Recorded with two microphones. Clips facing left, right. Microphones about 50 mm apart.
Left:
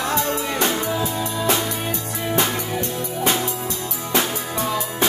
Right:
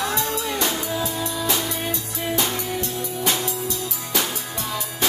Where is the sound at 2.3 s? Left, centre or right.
Left.